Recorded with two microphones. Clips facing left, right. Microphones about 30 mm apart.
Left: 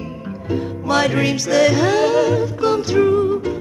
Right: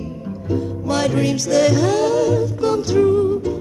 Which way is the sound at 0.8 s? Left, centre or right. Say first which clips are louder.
Left 2 dB; centre.